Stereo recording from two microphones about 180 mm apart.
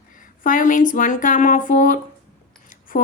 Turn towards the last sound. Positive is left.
turn(degrees=50)  # may be behind; listen again after turning